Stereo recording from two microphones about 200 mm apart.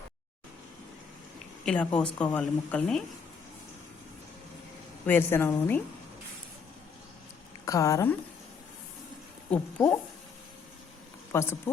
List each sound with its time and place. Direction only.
1.6 s speech: 5° left (ahead or behind)
5.0 s speech: 10° left (ahead or behind)
7.6 s speech: 15° left (ahead or behind)
9.5 s speech: 5° left (ahead or behind)
11.3 s speech: 15° left (ahead or behind)